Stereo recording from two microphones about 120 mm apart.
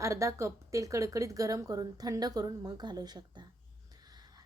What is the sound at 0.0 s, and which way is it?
A woman's voice, 25° right (ahead or behind).